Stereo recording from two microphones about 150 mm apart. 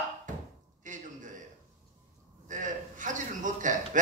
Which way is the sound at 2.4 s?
60° right (ahead or behind).